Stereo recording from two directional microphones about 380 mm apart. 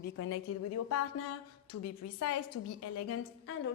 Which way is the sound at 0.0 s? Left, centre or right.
Left.